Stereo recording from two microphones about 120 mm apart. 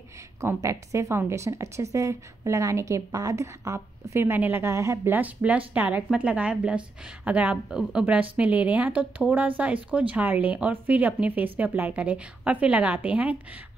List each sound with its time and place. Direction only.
0.4 s a woman's voice: 25° right (ahead or behind)